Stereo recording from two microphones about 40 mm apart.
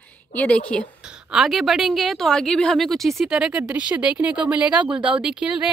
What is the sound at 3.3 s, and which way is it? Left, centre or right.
Speech, right.